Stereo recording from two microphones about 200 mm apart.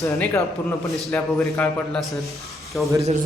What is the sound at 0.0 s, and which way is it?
Speech, 15° left (ahead or behind).